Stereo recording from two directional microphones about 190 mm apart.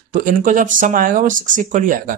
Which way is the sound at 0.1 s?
45° right (ahead or behind).